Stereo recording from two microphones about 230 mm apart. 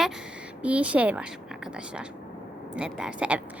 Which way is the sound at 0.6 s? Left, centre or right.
Centre.